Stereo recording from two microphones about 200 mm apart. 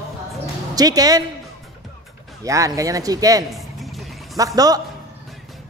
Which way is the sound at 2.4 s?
15° right (ahead or behind).